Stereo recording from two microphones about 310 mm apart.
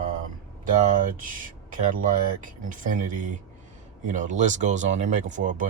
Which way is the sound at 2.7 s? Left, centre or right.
Right.